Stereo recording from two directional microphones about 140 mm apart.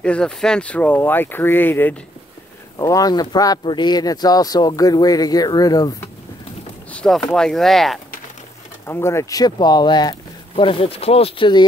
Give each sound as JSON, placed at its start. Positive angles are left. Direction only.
{"t": 0.0, "sound": "speech", "side_deg": 5}
{"t": 2.8, "sound": "speech", "side_deg": 25}
{"t": 6.9, "sound": "speech", "side_deg": 5}
{"t": 8.8, "sound": "speech", "side_deg": 20}